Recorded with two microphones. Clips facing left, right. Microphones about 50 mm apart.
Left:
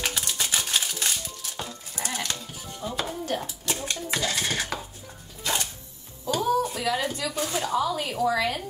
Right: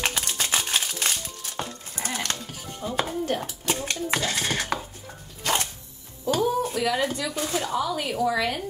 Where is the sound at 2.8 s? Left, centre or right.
Right.